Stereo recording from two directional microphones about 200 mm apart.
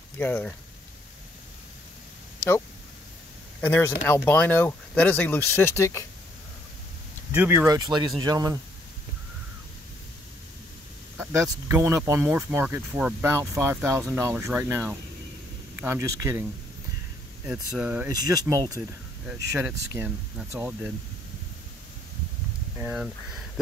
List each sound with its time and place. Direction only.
0.2 s speech: 10° left (ahead or behind)
3.6 s speech: 10° left (ahead or behind)
7.3 s speech: 10° right (ahead or behind)
11.1 s speech: 10° right (ahead or behind)
17.5 s speech: 5° right (ahead or behind)
18.1 s speech: 20° right (ahead or behind)
22.8 s speech: 10° right (ahead or behind)